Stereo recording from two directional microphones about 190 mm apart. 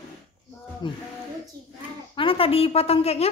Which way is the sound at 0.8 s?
25° left (ahead or behind).